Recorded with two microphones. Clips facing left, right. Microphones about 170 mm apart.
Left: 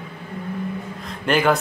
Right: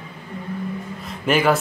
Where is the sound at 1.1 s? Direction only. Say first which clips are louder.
Even; 5° right (ahead or behind).